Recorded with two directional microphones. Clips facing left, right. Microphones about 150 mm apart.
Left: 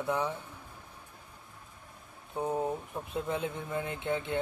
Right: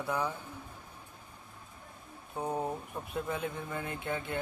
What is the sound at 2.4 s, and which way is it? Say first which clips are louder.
Speech: left 2 dB; centre (ahead or behind).